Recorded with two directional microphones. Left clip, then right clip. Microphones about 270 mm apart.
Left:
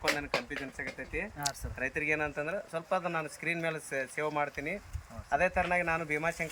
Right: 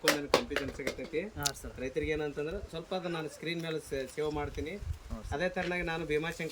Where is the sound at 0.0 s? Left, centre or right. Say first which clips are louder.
Right 3 dB; right.